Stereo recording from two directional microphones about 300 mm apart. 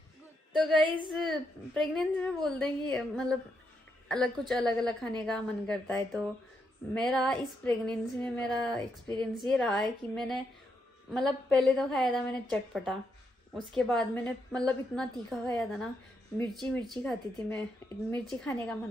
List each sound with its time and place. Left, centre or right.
0.7 s a woman's voice: centre
1.0 s a woman's voice: centre